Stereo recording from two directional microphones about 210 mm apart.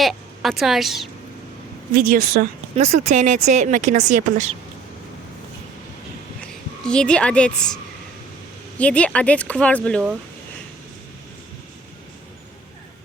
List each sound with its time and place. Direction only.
0.0 s a woman's voice: centre (ahead or behind)
2.0 s a woman's voice: 45° right (ahead or behind)
2.8 s speech: 30° right (ahead or behind)
6.4 s a woman's voice: 5° left (ahead or behind)
8.8 s speech: 5° left (ahead or behind)